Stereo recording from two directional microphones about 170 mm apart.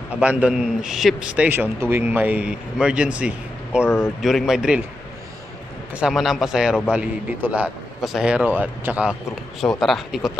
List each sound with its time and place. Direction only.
0.2 s a man's voice: 10° right (ahead or behind)
3.8 s speech: 15° left (ahead or behind)
4.2 s a man's voice: centre (ahead or behind)
5.9 s a man's voice: centre (ahead or behind)
9.6 s a man's voice: centre (ahead or behind)